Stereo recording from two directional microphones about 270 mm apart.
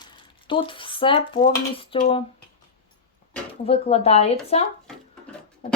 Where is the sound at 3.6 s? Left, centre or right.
Left.